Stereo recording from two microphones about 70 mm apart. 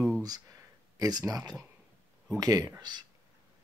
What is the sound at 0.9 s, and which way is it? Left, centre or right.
Speech, right.